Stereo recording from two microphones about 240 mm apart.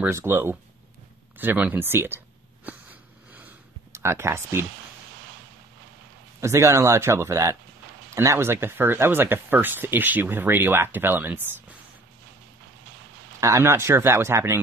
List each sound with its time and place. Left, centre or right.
0.0 s speech: centre
1.4 s a sound: centre
6.4 s speech: centre
13.4 s speech: centre